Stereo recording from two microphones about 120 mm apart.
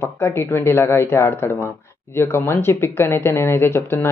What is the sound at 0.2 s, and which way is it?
Speech, 20° left (ahead or behind).